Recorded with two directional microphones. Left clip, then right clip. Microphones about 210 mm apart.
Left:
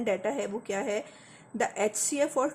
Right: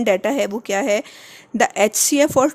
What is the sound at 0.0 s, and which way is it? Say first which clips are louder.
Speech: right 12 dB; 50° right (ahead or behind).